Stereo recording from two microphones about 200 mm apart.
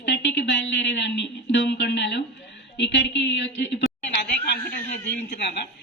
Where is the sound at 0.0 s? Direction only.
60° left (ahead or behind).